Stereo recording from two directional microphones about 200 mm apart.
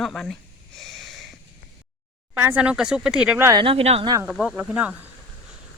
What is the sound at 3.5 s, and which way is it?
Speech, 25° right (ahead or behind).